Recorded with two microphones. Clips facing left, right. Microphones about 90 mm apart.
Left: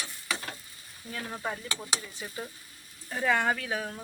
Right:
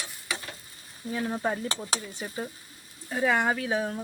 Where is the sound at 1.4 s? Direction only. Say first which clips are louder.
Right 6 dB; 40° right (ahead or behind).